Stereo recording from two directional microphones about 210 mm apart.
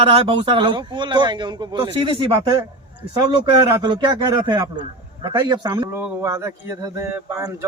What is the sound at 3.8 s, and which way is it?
A man's voice, 20° right (ahead or behind).